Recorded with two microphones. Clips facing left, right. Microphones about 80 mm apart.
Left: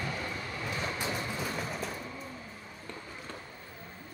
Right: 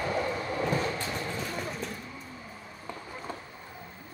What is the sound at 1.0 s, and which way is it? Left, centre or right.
Vehicle, centre.